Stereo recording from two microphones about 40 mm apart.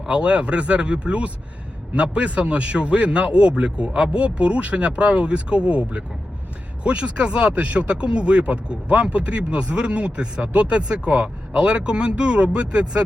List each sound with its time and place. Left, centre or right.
0.0 s speech: right